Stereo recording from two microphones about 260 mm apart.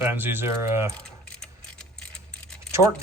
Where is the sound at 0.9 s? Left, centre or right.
Centre.